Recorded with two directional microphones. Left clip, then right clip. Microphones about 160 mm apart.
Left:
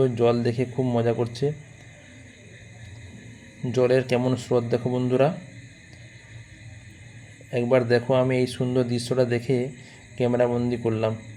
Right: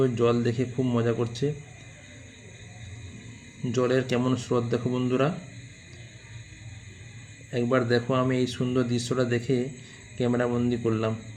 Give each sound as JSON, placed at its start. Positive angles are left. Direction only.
{"t": 0.0, "sound": "speech", "side_deg": 25}
{"t": 3.7, "sound": "speech", "side_deg": 25}
{"t": 7.5, "sound": "speech", "side_deg": 30}